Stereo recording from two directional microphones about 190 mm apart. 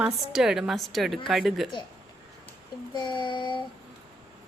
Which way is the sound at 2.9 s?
25° left (ahead or behind).